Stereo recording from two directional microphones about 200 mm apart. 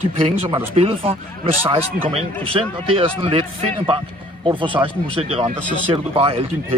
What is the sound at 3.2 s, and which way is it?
A man's voice, 25° right (ahead or behind).